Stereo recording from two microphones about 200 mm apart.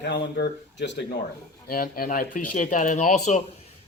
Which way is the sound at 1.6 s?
45° left (ahead or behind).